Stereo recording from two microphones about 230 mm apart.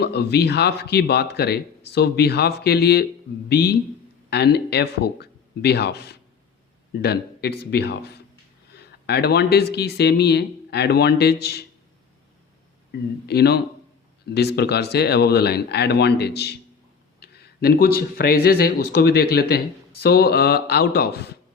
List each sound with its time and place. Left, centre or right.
0.0 s speech: left
13.2 s speech: left